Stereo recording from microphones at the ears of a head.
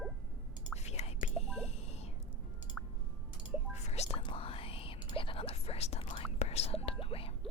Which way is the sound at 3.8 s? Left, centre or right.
Left.